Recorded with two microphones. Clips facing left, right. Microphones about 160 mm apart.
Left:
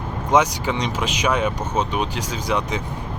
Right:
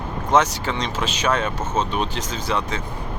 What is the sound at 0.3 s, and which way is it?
Speech, 15° left (ahead or behind).